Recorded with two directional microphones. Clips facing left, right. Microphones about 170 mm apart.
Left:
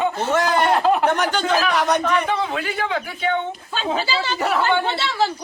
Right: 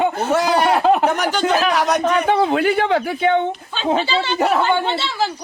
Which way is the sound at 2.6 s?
55° right (ahead or behind).